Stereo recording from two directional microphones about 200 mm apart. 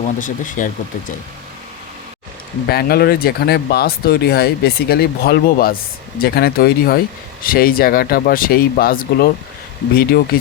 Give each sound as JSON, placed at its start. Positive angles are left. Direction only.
{"t": 0.2, "sound": "speech", "side_deg": 40}
{"t": 2.6, "sound": "speech", "side_deg": 50}